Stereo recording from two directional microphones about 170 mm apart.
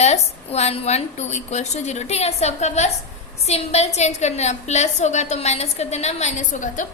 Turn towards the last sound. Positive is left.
turn(degrees=50)  # may be behind; listen again after turning